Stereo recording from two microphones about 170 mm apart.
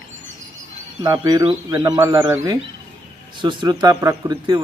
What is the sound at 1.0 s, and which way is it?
Speech, 25° right (ahead or behind).